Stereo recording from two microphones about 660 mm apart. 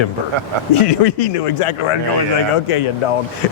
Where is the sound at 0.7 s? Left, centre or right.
Left.